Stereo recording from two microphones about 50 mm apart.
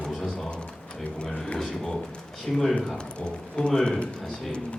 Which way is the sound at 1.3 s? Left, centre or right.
Left.